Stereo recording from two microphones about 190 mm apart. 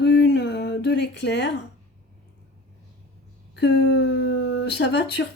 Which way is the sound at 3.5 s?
65° left (ahead or behind).